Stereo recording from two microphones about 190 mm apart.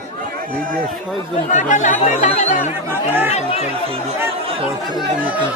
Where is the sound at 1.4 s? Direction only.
40° left (ahead or behind).